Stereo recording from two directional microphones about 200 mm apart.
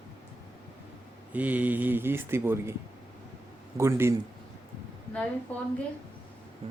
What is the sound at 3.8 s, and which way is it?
Speech, 15° right (ahead or behind).